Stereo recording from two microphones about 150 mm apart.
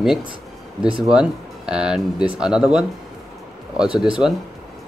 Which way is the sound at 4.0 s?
5° right (ahead or behind).